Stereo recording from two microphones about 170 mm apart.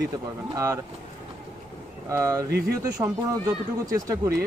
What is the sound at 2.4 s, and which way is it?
Speech, 75° right (ahead or behind).